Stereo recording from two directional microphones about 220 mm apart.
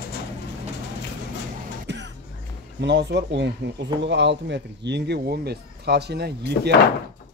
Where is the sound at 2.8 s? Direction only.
50° right (ahead or behind).